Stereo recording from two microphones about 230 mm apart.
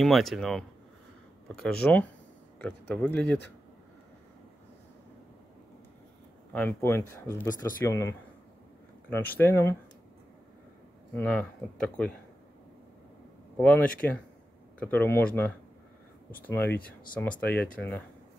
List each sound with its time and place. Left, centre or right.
0.0 s speech: centre
6.5 s speech: centre
11.1 s speech: centre
13.6 s speech: centre